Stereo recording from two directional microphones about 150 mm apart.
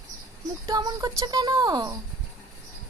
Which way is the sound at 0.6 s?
25° right (ahead or behind).